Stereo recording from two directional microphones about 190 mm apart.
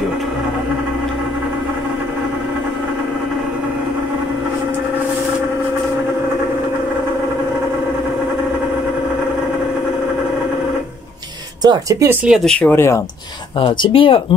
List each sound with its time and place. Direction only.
11.6 s speech: 20° right (ahead or behind)
12.1 s speech: 10° right (ahead or behind)
12.4 s speech: 5° left (ahead or behind)
13.6 s speech: 25° left (ahead or behind)